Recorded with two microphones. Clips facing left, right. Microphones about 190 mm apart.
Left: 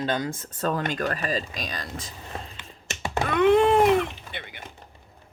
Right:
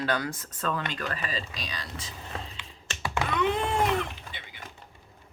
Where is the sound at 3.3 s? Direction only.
60° left (ahead or behind).